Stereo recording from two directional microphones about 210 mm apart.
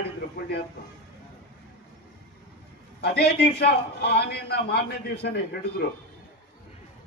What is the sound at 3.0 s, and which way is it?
A man's voice, 50° left (ahead or behind).